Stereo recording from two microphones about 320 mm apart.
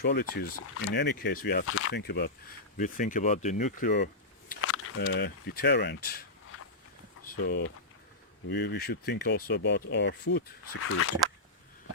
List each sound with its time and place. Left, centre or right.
0.0 s speech: left
7.4 s speech: left